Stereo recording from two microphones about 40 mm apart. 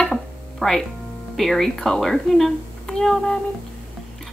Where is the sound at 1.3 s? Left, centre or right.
Centre.